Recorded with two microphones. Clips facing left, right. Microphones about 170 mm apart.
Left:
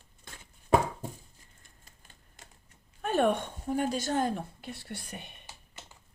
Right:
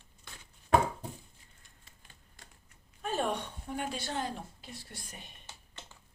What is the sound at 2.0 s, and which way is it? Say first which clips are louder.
Typewriter: even; 45° left (ahead or behind).